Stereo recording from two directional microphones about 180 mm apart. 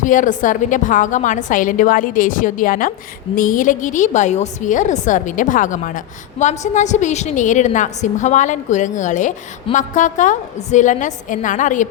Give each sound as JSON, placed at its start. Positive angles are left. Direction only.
{"t": 0.0, "sound": "a woman's voice", "side_deg": 45}